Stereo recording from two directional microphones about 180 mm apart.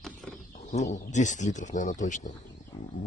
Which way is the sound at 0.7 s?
40° left (ahead or behind).